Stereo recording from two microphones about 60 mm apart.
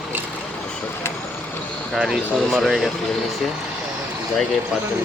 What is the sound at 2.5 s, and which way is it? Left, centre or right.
Speech, centre.